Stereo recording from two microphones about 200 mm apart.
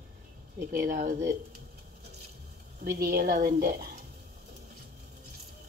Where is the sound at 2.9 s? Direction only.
50° right (ahead or behind).